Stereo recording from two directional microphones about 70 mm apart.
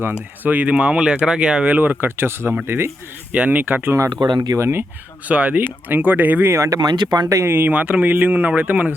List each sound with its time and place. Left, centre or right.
0.4 s speech: right
3.3 s speech: right
4.1 s speech: right
4.5 s speech: right
5.3 s speech: right
6.5 s speech: right
6.7 s speech: right
7.3 s speech: right
7.5 s speech: right